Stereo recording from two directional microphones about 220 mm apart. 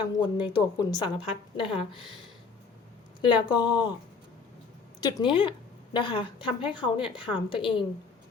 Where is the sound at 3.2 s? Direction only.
20° left (ahead or behind).